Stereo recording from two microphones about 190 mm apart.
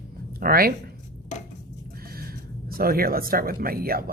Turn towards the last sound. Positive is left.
turn(degrees=-50)  # may be behind; listen again after turning